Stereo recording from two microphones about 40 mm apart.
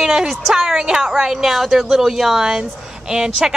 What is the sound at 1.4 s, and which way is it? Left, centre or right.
Speech, centre.